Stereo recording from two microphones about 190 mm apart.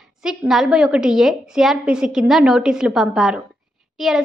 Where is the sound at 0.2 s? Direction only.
Centre (ahead or behind).